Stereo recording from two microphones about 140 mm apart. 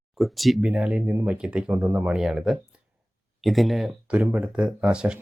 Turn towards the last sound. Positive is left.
turn(degrees=-5)  # may be behind; listen again after turning